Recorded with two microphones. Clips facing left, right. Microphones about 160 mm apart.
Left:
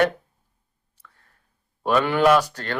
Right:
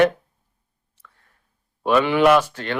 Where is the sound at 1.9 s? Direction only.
45° left (ahead or behind).